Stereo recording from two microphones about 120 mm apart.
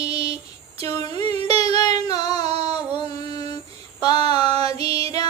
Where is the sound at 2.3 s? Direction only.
60° right (ahead or behind).